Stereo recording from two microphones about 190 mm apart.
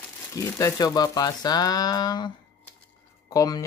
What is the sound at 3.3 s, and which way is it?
Speech, 20° left (ahead or behind).